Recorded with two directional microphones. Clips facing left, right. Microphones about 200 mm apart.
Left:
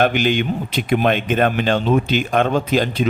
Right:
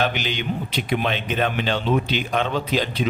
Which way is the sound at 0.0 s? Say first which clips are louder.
Left 7 dB; 50° left (ahead or behind).